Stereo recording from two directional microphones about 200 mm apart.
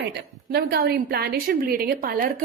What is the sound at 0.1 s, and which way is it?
A woman's voice, 55° right (ahead or behind).